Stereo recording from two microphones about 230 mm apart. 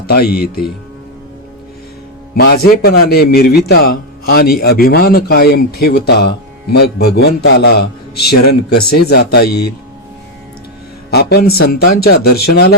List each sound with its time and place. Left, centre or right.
0.1 s speech: left
2.3 s a man's voice: left
11.1 s a man's voice: left